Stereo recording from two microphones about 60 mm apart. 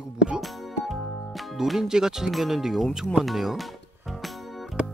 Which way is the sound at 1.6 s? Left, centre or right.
Centre.